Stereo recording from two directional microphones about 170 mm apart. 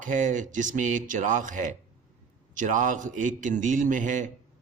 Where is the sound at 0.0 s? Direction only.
45° right (ahead or behind).